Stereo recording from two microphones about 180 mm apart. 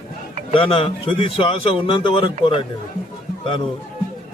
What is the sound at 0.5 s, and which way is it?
A man's voice, 30° left (ahead or behind).